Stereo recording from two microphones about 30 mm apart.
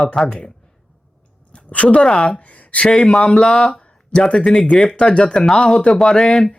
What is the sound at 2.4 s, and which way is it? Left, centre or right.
Speech, left.